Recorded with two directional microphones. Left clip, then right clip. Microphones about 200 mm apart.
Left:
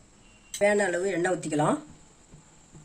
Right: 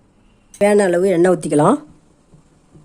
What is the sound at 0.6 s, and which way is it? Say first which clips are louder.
Speech: right 10 dB; 55° right (ahead or behind).